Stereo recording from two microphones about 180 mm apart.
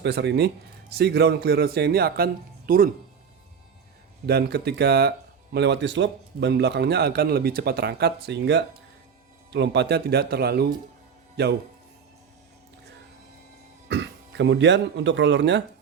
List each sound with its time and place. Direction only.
0.0 s a man's voice: 70° right (ahead or behind); by 2.9 s 50° right (ahead or behind)
4.3 s a man's voice: 60° right (ahead or behind)
5.5 s a man's voice: 70° right (ahead or behind)
13.8 s speech: 80° right